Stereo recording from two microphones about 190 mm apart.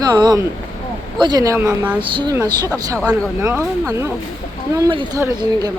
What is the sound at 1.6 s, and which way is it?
Speech, 10° right (ahead or behind).